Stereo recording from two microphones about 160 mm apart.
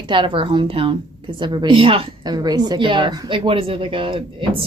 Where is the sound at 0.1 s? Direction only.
30° right (ahead or behind).